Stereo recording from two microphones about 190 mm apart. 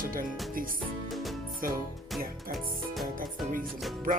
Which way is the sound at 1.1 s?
Centre (ahead or behind).